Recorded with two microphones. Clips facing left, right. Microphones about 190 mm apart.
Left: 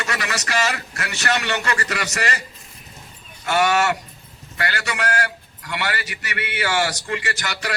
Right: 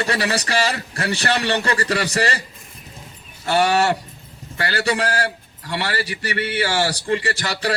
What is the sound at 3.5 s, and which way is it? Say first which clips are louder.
A man's voice: right 2 dB; 30° right (ahead or behind).